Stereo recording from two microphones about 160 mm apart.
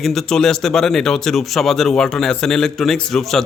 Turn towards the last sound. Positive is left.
turn(degrees=0)  # may be behind; listen again after turning